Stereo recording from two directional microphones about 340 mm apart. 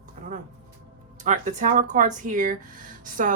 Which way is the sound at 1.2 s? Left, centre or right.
Right.